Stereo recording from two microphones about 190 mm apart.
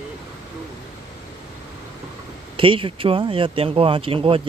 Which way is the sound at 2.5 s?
30° right (ahead or behind).